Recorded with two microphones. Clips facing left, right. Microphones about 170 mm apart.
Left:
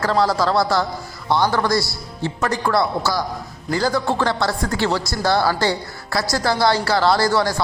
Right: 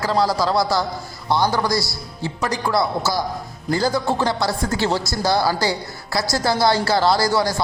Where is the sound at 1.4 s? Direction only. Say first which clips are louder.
Left 1 dB; 15° right (ahead or behind).